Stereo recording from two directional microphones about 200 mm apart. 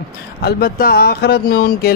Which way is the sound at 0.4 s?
50° left (ahead or behind).